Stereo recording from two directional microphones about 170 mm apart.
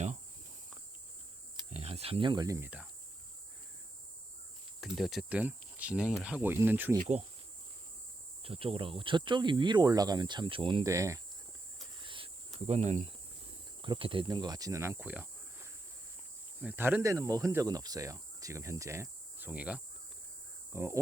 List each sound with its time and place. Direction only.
1.7 s speech: 35° right (ahead or behind); by 2.6 s 20° right (ahead or behind)
4.9 s speech: centre (ahead or behind)
7.0 s insect: 40° right (ahead or behind)
8.4 s speech: 35° right (ahead or behind)
10.8 s speech: 20° right (ahead or behind)
11.9 s cricket: 30° right (ahead or behind)
13.8 s speech: 30° right (ahead or behind)